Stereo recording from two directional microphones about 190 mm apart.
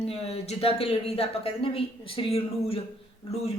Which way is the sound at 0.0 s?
35° left (ahead or behind).